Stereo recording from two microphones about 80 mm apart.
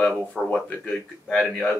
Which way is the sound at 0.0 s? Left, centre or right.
Centre.